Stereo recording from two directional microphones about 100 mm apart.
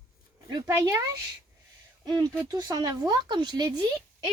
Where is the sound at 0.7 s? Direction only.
25° right (ahead or behind).